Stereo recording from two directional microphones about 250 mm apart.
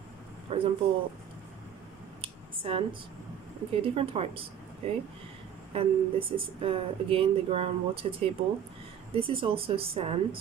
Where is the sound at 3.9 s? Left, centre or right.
Right.